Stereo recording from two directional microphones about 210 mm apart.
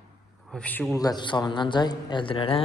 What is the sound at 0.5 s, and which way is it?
A man's voice, 5° left (ahead or behind).